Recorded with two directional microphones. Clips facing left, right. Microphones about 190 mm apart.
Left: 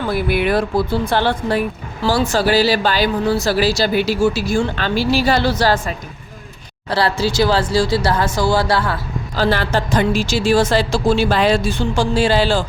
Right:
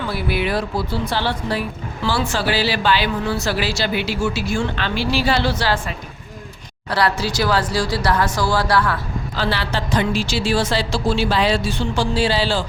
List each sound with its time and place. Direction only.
0.1 s speech: 50° left (ahead or behind)
2.0 s speech: 40° left (ahead or behind)
6.9 s speech: 30° left (ahead or behind)
9.3 s speech: 45° left (ahead or behind)